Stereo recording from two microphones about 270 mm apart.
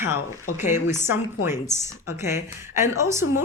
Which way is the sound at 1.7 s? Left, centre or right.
Centre.